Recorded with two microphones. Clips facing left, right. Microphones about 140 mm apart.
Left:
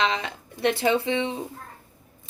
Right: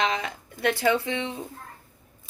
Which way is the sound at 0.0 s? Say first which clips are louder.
Left 1 dB; 30° left (ahead or behind).